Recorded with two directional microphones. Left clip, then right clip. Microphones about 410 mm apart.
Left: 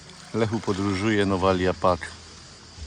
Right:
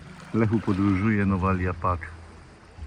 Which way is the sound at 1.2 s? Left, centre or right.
Centre.